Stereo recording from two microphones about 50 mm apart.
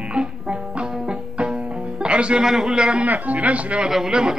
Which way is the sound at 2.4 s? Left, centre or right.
Centre.